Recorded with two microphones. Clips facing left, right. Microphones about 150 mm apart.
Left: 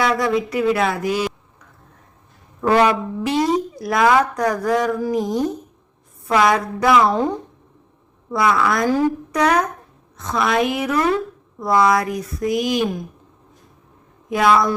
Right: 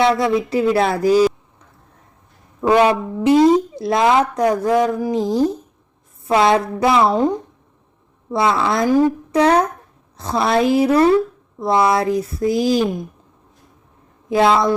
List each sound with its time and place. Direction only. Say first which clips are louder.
0.0 s speech: right 3 dB; 25° right (ahead or behind)
2.6 s a woman's voice: right 2 dB; 20° right (ahead or behind)
5.1 s a woman's voice: right 3 dB; 30° right (ahead or behind)
8.3 s a woman's voice: right 1 dB; 25° right (ahead or behind)
8.9 s a woman's voice: right 3 dB; 15° right (ahead or behind)
9.4 s a woman's voice: right 3 dB; 30° right (ahead or behind)
14.3 s a woman's voice: right 2 dB; 25° right (ahead or behind)